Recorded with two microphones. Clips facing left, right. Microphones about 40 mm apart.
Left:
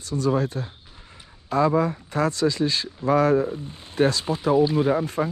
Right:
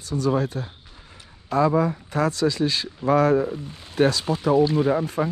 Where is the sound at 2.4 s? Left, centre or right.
Right.